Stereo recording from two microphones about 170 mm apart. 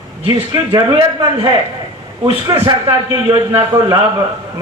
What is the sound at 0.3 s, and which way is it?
A man's voice, 30° right (ahead or behind).